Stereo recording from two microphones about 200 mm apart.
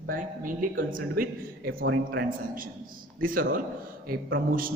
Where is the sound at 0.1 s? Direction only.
45° right (ahead or behind).